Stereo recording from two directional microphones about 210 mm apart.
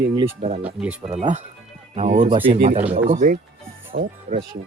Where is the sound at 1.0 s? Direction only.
30° right (ahead or behind).